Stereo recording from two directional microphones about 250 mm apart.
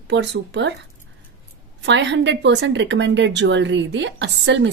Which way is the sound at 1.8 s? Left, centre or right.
Right.